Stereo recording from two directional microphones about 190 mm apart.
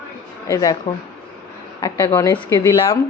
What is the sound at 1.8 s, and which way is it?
A woman's voice, 15° left (ahead or behind).